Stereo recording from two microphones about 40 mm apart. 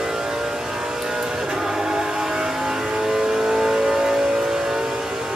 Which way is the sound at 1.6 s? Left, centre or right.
Centre.